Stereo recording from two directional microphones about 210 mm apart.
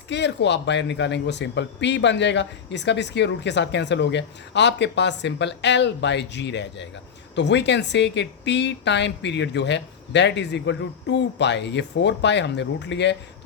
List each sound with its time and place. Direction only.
0.1 s speech: 55° left (ahead or behind)